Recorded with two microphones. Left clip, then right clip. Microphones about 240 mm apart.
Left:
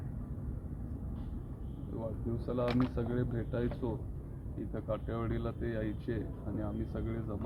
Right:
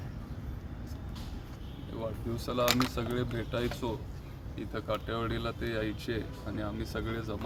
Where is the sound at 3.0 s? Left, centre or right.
Centre.